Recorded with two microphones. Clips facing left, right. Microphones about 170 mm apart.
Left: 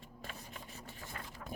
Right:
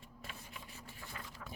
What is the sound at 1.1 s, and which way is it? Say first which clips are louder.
Boat: left 1 dB; 45° left (ahead or behind).